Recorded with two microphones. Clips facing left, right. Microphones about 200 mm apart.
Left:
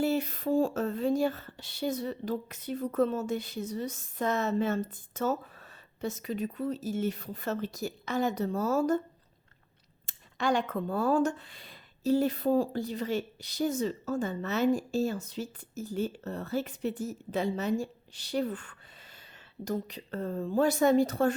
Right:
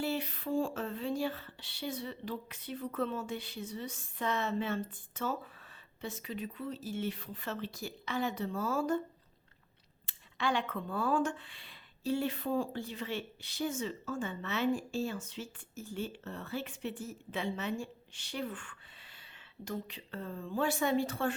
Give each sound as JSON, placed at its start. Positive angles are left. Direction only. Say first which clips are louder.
{"t": 0.0, "sound": "speech", "louder": "left 7 dB", "side_deg": 45}
{"t": 10.1, "sound": "speech", "louder": "left 5 dB", "side_deg": 45}